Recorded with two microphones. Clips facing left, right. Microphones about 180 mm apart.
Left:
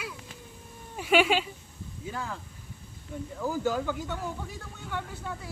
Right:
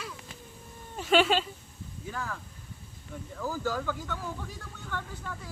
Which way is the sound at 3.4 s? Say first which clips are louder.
Left 3 dB; 15° left (ahead or behind).